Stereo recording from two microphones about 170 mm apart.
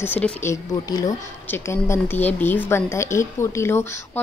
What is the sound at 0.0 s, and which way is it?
Speech, 10° left (ahead or behind).